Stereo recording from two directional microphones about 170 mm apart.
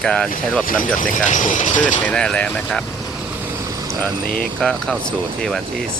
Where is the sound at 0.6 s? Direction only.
55° left (ahead or behind).